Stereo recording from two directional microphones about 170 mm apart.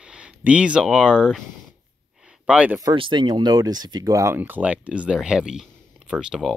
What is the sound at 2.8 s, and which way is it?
Speech, 25° right (ahead or behind).